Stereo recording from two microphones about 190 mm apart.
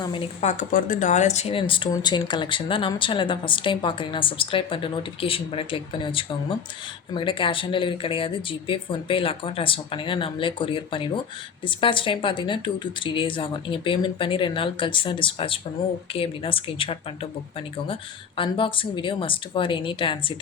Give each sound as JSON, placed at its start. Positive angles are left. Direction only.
{"t": 0.0, "sound": "speech", "side_deg": 30}
{"t": 0.5, "sound": "speech", "side_deg": 45}
{"t": 18.3, "sound": "speech", "side_deg": 25}